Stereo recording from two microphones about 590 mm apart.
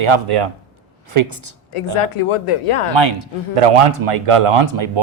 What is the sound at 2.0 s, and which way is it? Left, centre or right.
Speech, left.